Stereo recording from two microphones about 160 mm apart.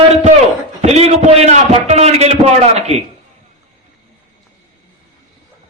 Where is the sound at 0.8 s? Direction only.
40° right (ahead or behind).